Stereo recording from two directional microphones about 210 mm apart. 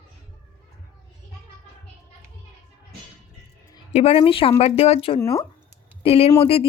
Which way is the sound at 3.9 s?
30° left (ahead or behind).